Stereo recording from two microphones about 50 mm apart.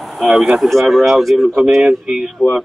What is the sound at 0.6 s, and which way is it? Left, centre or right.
Speech, centre.